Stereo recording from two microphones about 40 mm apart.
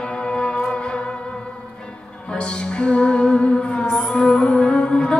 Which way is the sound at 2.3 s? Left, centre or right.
Left.